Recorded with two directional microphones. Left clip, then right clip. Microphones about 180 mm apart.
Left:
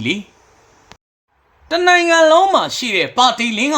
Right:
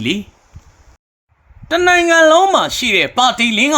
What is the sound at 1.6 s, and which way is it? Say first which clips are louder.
Speech: right 1 dB; 15° right (ahead or behind).